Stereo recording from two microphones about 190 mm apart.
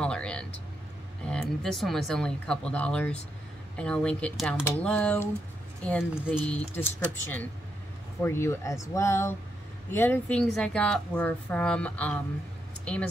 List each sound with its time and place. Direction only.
0.0 s vehicle: 5° left (ahead or behind)
1.2 s a woman's voice: 5° left (ahead or behind)